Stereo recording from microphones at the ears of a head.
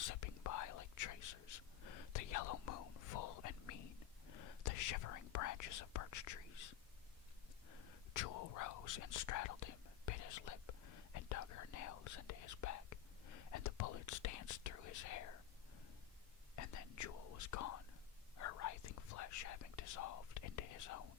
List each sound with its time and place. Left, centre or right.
0.0 s whispering: left
16.6 s whispering: left